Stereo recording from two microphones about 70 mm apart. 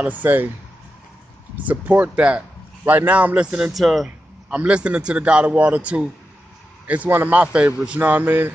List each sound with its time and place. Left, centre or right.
0.0 s a man's voice: right
1.7 s a man's voice: right
3.7 s speech: centre
4.5 s a man's voice: centre